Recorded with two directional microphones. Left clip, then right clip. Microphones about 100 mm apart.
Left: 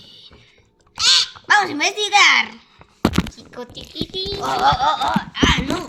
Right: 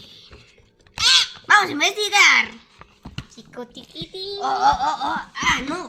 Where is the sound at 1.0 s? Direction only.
30° right (ahead or behind).